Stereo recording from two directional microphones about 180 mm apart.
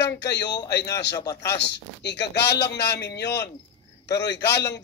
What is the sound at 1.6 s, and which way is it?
A man's voice, 70° left (ahead or behind).